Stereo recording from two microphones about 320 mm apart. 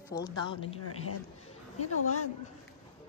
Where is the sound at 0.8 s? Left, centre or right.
Left.